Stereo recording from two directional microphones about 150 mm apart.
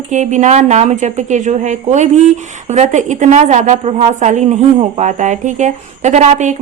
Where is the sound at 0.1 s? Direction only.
50° right (ahead or behind).